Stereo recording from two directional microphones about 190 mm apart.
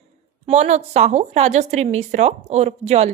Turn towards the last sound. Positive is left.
turn(degrees=-35)  # may be behind; listen again after turning